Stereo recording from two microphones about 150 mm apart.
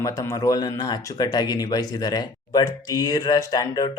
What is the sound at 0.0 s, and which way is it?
Speech, 20° left (ahead or behind).